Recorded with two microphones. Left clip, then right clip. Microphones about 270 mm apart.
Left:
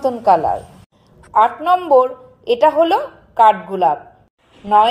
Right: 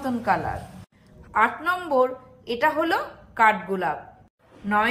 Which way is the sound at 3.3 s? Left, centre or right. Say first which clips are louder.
Left 8 dB; left.